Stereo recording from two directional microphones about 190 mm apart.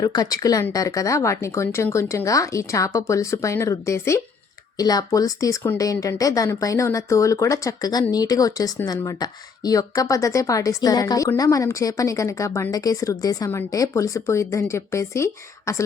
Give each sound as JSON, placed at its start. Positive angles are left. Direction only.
{"t": 0.0, "sound": "speech", "side_deg": 20}